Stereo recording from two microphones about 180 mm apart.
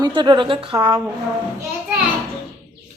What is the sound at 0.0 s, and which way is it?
A woman's voice, 25° right (ahead or behind).